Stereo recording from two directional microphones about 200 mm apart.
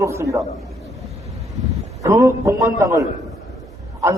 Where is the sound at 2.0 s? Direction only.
15° right (ahead or behind).